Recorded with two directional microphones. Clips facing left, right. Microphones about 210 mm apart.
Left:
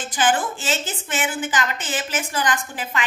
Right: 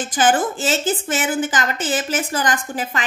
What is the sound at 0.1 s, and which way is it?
A woman's voice, 45° right (ahead or behind).